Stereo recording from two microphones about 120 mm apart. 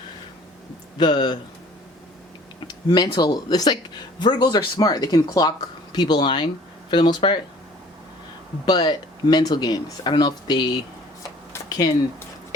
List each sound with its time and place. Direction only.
0.9 s speech: 40° left (ahead or behind)
2.6 s speech: 35° left (ahead or behind)
8.6 s speech: 35° left (ahead or behind)